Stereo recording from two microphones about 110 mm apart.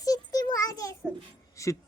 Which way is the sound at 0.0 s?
35° left (ahead or behind).